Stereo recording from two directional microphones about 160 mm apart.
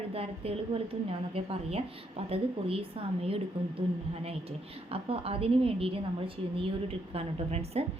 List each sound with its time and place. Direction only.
0.1 s a woman's voice: 35° right (ahead or behind)
4.9 s a woman's voice: 35° right (ahead or behind)